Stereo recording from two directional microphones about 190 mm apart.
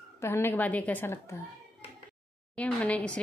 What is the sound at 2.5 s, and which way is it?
Speech, 5° left (ahead or behind).